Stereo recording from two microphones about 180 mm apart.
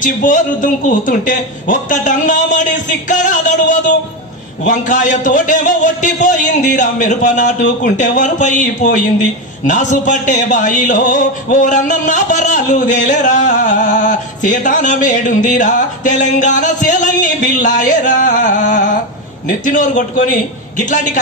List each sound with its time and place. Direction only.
0.0 s a man's voice: 45° left (ahead or behind)